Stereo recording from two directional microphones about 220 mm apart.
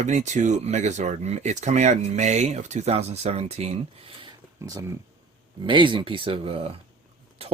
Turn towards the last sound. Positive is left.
turn(degrees=-25)  # may be behind; listen again after turning